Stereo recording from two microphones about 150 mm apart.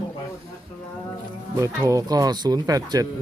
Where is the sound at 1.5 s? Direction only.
20° right (ahead or behind).